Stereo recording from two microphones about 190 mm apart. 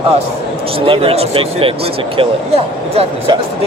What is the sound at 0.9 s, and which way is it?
Speech, 30° right (ahead or behind).